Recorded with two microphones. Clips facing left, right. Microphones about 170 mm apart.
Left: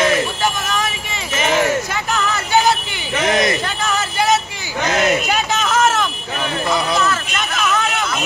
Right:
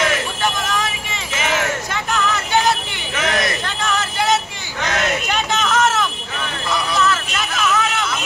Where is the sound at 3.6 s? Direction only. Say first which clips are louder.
Left 1 dB; 5° left (ahead or behind).